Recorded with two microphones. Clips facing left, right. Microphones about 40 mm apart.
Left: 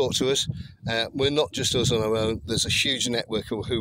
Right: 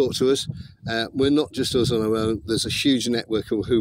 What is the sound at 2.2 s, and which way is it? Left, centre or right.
Speech, left.